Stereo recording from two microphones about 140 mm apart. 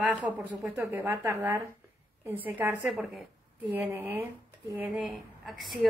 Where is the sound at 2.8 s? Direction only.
Centre (ahead or behind).